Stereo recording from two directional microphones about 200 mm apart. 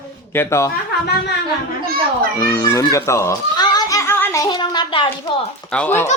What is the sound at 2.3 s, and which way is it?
A child's voice, 15° left (ahead or behind).